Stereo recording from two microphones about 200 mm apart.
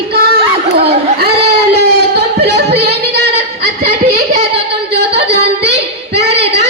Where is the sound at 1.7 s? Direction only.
55° right (ahead or behind).